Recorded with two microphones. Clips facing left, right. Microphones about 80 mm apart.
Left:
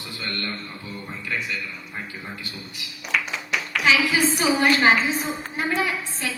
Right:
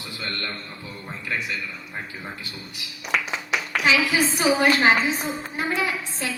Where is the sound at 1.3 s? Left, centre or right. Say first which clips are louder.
Even; right.